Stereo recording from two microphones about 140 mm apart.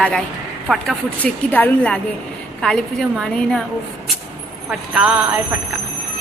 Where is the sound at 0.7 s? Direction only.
5° left (ahead or behind).